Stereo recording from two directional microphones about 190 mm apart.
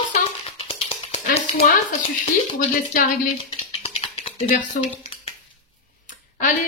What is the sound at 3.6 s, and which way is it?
Typing, 35° left (ahead or behind).